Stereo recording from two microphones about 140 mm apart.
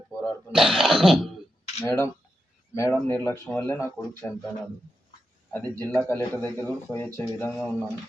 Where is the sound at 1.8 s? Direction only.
15° left (ahead or behind).